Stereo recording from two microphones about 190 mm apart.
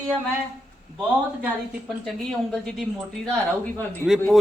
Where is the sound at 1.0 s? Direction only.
10° right (ahead or behind).